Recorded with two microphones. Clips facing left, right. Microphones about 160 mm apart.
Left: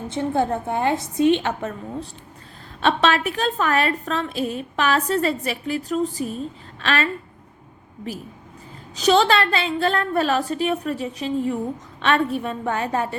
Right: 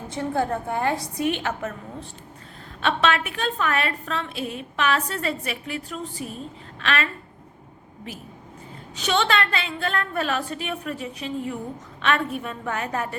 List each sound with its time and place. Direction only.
0.1 s a woman's voice: 25° left (ahead or behind)
9.0 s a woman's voice: 35° left (ahead or behind)